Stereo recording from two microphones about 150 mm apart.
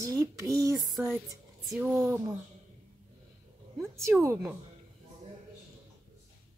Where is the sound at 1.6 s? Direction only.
10° right (ahead or behind).